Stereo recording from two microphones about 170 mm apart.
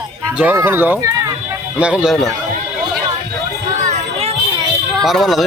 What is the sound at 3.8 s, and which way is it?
Children playing, 40° right (ahead or behind).